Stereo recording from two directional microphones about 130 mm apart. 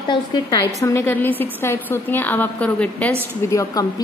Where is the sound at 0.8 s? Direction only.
20° left (ahead or behind).